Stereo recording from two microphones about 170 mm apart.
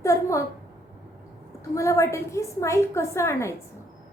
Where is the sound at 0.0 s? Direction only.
20° left (ahead or behind).